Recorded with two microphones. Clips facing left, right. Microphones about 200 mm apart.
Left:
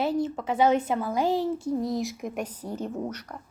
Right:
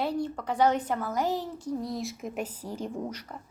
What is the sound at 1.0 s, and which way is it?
Speech, 10° left (ahead or behind).